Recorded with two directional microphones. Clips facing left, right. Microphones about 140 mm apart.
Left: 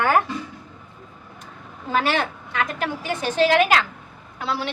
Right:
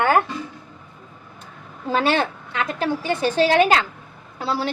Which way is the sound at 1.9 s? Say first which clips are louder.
Right 2 dB; 30° right (ahead or behind).